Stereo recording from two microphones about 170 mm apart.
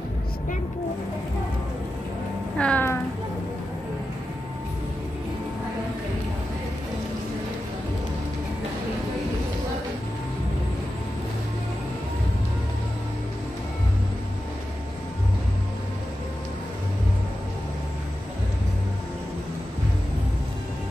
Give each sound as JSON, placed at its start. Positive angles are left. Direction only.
{"t": 2.5, "sound": "speech", "side_deg": 5}